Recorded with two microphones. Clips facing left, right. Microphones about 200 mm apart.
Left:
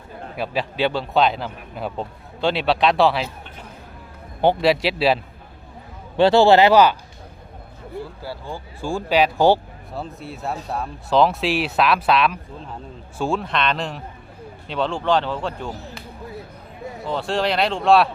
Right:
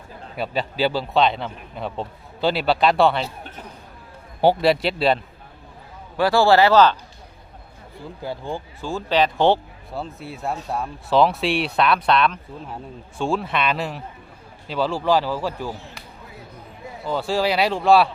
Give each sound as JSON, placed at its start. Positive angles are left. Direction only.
{"t": 0.3, "sound": "speech", "side_deg": 0}
{"t": 4.4, "sound": "speech", "side_deg": -5}
{"t": 6.1, "sound": "speech", "side_deg": 25}
{"t": 8.2, "sound": "speech", "side_deg": -20}
{"t": 8.8, "sound": "speech", "side_deg": 10}
{"t": 17.1, "sound": "speech", "side_deg": 0}